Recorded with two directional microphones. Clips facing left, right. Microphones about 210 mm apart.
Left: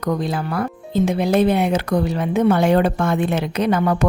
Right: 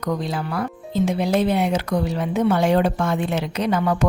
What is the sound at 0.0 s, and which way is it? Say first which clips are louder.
A woman's voice: left 3 dB; 55° left (ahead or behind).